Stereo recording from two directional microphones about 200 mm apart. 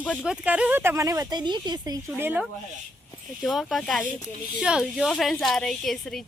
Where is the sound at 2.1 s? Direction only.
10° right (ahead or behind).